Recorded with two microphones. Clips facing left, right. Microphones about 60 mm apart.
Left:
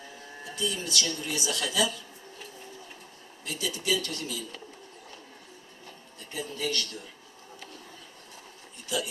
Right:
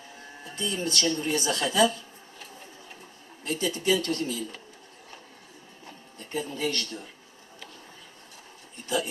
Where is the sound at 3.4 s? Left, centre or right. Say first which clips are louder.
Right 5 dB; right.